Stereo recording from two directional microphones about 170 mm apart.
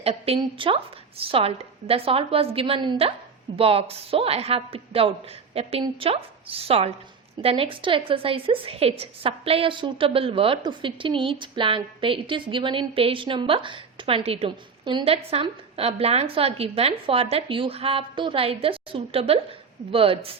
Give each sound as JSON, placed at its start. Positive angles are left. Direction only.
{"t": 0.0, "sound": "a woman's voice", "side_deg": -35}